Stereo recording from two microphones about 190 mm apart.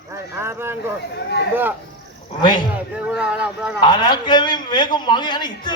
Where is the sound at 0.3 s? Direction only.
15° right (ahead or behind).